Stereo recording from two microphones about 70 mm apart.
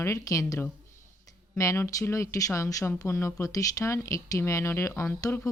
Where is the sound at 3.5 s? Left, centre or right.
Left.